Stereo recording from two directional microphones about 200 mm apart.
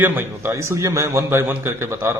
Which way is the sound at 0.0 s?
10° right (ahead or behind).